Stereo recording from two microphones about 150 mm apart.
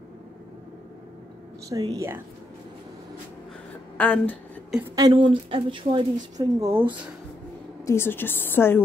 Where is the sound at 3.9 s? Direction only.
10° left (ahead or behind).